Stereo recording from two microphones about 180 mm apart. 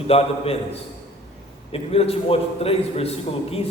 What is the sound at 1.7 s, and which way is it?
A man's voice, 35° left (ahead or behind).